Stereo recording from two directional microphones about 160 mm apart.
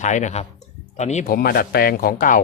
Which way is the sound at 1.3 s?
65° left (ahead or behind).